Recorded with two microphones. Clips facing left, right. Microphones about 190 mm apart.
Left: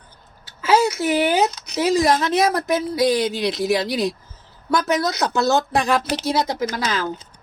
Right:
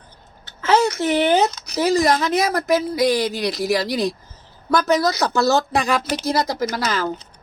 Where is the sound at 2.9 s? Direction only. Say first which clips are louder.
Even; 25° left (ahead or behind).